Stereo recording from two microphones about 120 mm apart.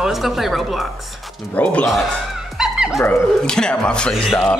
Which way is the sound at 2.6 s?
5° right (ahead or behind).